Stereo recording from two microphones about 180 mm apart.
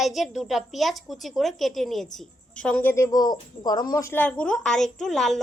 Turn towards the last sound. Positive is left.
turn(degrees=0)  # may be behind; listen again after turning